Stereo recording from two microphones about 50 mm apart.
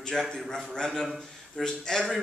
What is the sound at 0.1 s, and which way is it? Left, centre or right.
A man's voice, centre.